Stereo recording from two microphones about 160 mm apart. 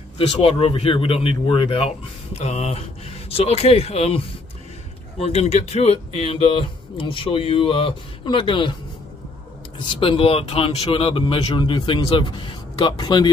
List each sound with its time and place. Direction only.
0.3 s speech: 35° left (ahead or behind)
5.2 s speech: 40° left (ahead or behind)
9.8 s speech: 35° left (ahead or behind)